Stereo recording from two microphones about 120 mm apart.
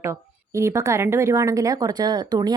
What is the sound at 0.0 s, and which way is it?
Speech, 25° right (ahead or behind).